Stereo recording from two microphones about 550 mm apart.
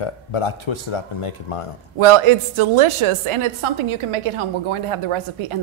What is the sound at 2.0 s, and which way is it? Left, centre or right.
A woman's voice, right.